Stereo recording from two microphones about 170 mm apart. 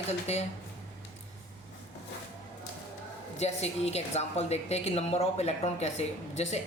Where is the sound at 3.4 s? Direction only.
40° left (ahead or behind).